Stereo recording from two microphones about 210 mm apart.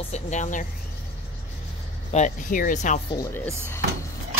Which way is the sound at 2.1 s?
35° left (ahead or behind).